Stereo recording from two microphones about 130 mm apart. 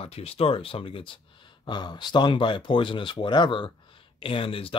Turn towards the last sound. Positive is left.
turn(degrees=45)  # may be behind; listen again after turning